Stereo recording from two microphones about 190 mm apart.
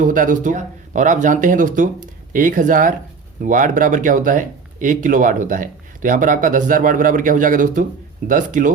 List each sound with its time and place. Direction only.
0.0 s speech: 45° right (ahead or behind)